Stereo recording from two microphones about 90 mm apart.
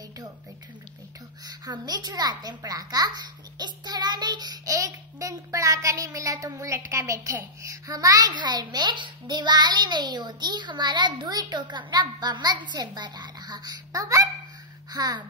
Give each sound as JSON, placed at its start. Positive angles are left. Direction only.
{"t": 1.4, "sound": "a child's voice", "side_deg": -50}